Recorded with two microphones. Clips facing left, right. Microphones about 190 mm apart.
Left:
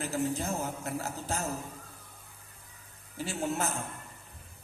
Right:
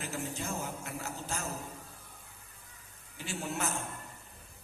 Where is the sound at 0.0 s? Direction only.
35° left (ahead or behind).